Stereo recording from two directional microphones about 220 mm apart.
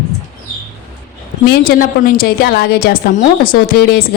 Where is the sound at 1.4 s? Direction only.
45° left (ahead or behind).